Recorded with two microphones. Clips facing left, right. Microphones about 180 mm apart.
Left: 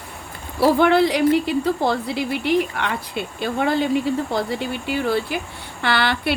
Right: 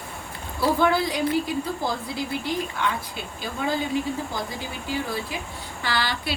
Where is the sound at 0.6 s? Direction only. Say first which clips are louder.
Left 6 dB; 70° left (ahead or behind).